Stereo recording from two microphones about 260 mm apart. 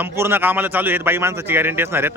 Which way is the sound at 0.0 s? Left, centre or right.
Centre.